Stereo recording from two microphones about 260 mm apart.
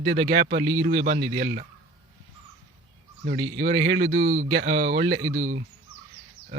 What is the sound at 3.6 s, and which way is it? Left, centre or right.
Speech, right.